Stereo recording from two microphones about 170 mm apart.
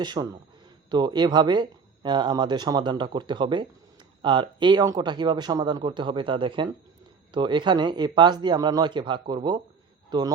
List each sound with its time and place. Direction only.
0.0 s speech: 25° right (ahead or behind)